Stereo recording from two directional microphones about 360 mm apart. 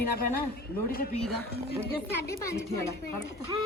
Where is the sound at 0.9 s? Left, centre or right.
Left.